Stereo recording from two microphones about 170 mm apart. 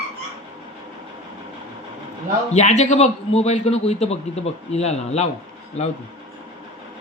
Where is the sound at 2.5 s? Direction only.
40° left (ahead or behind).